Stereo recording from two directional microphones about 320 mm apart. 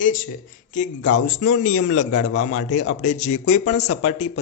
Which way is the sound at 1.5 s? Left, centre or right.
Left.